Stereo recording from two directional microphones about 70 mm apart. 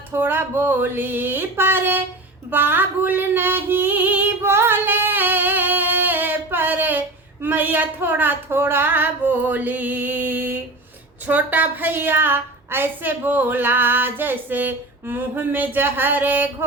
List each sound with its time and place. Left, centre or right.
0.1 s a woman's voice: right
2.5 s female singing: right
11.3 s a woman's voice: right